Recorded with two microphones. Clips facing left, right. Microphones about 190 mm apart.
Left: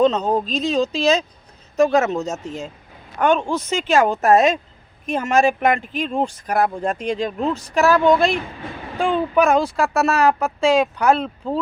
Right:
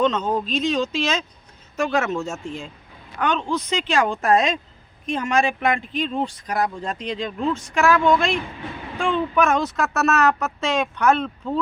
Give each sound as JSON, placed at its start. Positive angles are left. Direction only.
{"t": 0.0, "sound": "speech", "side_deg": 35}